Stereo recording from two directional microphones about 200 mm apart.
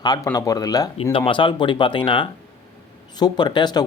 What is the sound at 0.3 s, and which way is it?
Speech, 20° left (ahead or behind).